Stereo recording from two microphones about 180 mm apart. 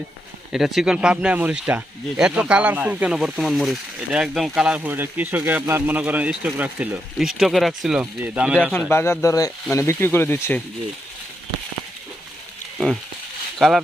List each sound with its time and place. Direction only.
0.5 s speech: centre (ahead or behind)
8.9 s speech: 15° left (ahead or behind)
13.6 s speech: centre (ahead or behind)